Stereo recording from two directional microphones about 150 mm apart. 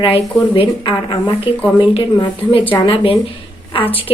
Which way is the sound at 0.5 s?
35° left (ahead or behind).